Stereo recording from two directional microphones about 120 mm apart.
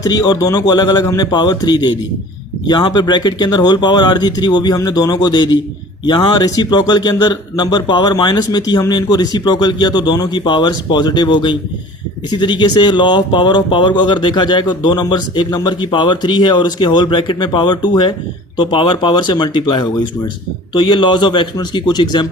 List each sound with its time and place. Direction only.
0.0 s speech: 30° left (ahead or behind)